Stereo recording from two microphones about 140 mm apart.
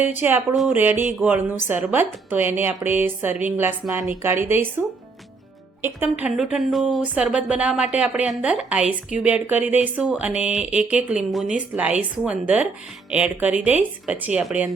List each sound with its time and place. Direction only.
0.2 s a woman's voice: 15° right (ahead or behind)
6.0 s a woman's voice: 10° right (ahead or behind)